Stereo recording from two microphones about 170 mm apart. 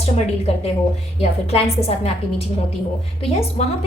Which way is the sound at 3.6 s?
40° left (ahead or behind).